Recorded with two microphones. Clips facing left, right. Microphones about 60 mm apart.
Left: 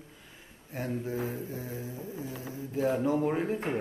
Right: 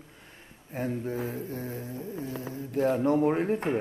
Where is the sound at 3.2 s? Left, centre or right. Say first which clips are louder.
Right 4 dB; centre.